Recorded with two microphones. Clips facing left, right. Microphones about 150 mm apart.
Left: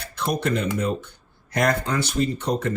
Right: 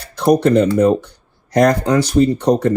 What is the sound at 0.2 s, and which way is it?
Speech, 65° right (ahead or behind).